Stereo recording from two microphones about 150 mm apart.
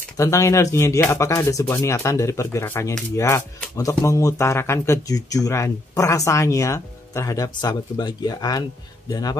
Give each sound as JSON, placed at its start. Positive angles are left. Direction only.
{"t": 0.2, "sound": "speech", "side_deg": 20}